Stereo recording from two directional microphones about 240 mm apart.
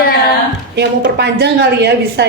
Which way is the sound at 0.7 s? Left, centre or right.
Right.